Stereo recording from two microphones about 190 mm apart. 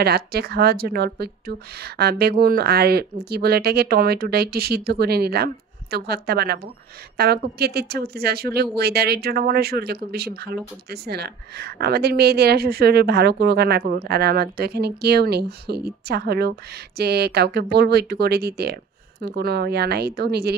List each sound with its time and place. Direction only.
0.0 s speech: 55° right (ahead or behind)